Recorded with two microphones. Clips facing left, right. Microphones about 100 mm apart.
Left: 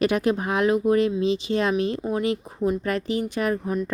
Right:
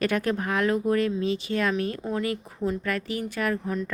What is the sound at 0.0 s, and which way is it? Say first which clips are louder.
Speech: left 4 dB; 15° left (ahead or behind).